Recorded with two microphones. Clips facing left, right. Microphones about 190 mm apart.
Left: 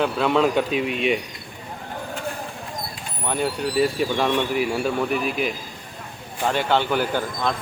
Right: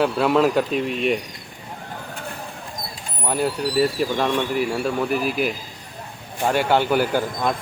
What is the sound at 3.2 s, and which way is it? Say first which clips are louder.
Speech: right 2 dB; 5° right (ahead or behind).